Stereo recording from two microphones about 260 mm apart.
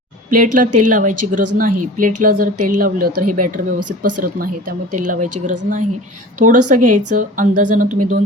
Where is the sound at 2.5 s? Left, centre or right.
Right.